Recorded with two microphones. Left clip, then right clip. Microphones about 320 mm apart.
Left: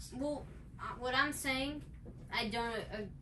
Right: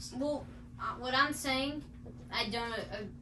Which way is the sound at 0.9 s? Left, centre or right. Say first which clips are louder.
Right 3 dB; centre.